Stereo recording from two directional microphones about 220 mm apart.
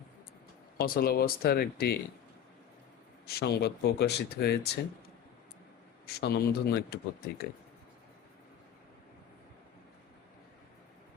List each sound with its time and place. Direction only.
0.8 s speech: 45° left (ahead or behind)
3.2 s speech: 45° left (ahead or behind)
6.1 s speech: 45° left (ahead or behind)